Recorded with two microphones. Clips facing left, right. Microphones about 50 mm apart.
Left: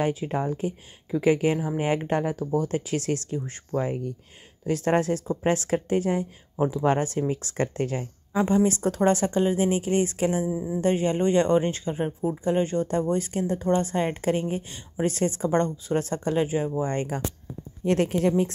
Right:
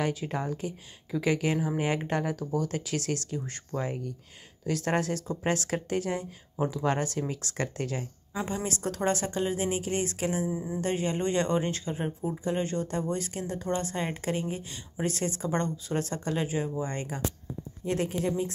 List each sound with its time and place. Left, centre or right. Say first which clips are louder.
0.0 s speech: left 5 dB; left
10.2 s speech: left 5 dB; centre
10.8 s speech: left 7 dB; left
16.8 s speech: left 6 dB; left
17.8 s speech: left 7 dB; left